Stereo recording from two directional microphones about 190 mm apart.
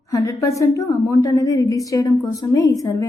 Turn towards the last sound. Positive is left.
turn(degrees=15)  # may be behind; listen again after turning